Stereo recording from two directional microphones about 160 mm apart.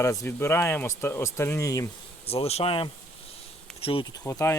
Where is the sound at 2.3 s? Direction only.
40° left (ahead or behind).